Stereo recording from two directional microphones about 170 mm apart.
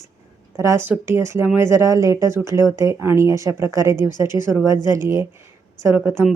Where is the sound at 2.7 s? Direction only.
15° right (ahead or behind).